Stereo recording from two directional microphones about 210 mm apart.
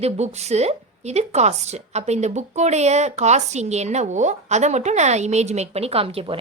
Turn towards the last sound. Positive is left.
turn(degrees=-25)  # may be behind; listen again after turning